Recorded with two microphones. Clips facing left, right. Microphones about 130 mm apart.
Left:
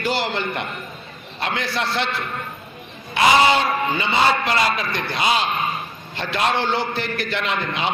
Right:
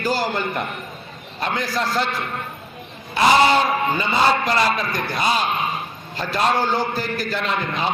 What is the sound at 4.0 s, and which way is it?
A man's voice, 40° right (ahead or behind).